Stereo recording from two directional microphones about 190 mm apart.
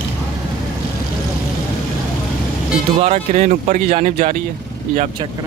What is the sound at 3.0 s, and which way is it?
Speech, 35° right (ahead or behind).